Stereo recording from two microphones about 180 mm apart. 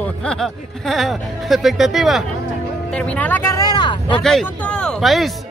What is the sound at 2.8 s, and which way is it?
Music, 5° left (ahead or behind).